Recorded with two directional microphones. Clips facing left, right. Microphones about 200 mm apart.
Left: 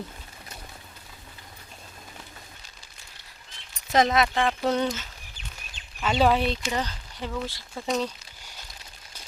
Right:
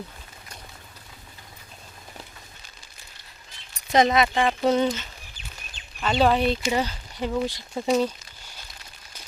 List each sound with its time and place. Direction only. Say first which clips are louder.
3.9 s speech: right 2 dB; centre (ahead or behind)
6.7 s speech: right 4 dB; 10° right (ahead or behind)
7.9 s speech: right 5 dB; 5° right (ahead or behind)